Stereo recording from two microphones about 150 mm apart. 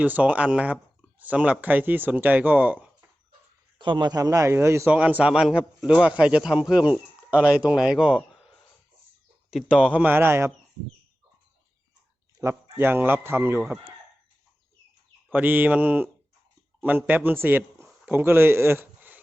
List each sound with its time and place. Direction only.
0.0 s a man's voice: 10° right (ahead or behind)
3.8 s a man's voice: 30° right (ahead or behind); by 8.2 s 5° right (ahead or behind)
9.5 s a man's voice: 5° right (ahead or behind)
12.4 s a man's voice: 20° right (ahead or behind)
15.3 s a man's voice: 10° right (ahead or behind)
17.8 s a sound: 10° right (ahead or behind)